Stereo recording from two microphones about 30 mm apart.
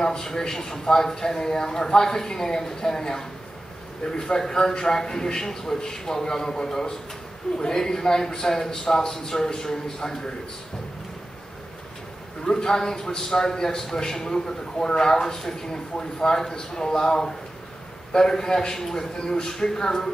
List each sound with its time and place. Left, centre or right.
0.0 s speech: left
12.4 s speech: centre
18.8 s a man's voice: centre